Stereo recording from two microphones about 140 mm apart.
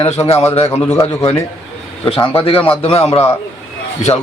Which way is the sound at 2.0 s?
40° left (ahead or behind).